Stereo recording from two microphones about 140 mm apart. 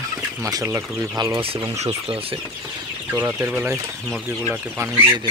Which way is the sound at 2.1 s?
40° right (ahead or behind).